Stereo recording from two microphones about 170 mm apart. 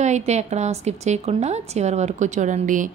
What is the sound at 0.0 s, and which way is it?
A woman's voice, 40° right (ahead or behind).